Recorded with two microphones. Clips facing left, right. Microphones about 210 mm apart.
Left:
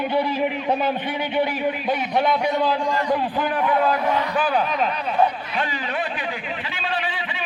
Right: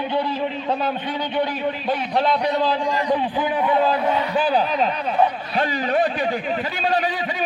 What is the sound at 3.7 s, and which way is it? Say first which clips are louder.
A man's voice: right 1 dB; 25° right (ahead or behind).